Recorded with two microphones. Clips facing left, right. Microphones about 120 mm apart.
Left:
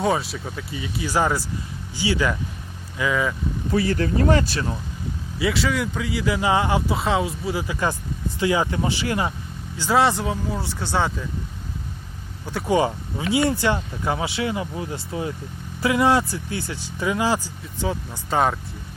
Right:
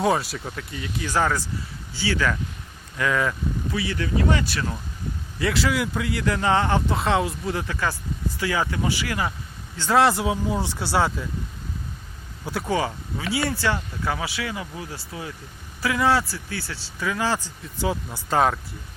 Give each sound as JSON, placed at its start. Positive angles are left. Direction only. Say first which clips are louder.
{"t": 0.0, "sound": "speech", "louder": "even", "side_deg": 0}
{"t": 3.0, "sound": "speech", "louder": "left 1 dB", "side_deg": 5}
{"t": 3.7, "sound": "speech", "louder": "left 7 dB", "side_deg": 40}
{"t": 5.4, "sound": "speech", "louder": "left 1 dB", "side_deg": 0}
{"t": 8.4, "sound": "speech", "louder": "left 4 dB", "side_deg": 20}
{"t": 9.7, "sound": "speech", "louder": "even", "side_deg": 10}
{"t": 10.0, "sound": "speech", "louder": "right 2 dB", "side_deg": -5}
{"t": 12.6, "sound": "speech", "louder": "left 6 dB", "side_deg": 25}
{"t": 17.6, "sound": "speech", "louder": "even", "side_deg": -5}